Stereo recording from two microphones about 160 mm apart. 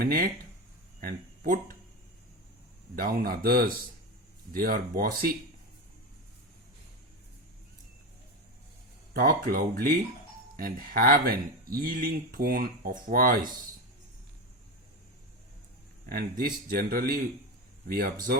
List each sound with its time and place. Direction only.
0.0 s speech: 70° right (ahead or behind)
2.9 s a man's voice: 65° right (ahead or behind)
9.1 s speech: 65° right (ahead or behind)
16.0 s a man's voice: 70° right (ahead or behind)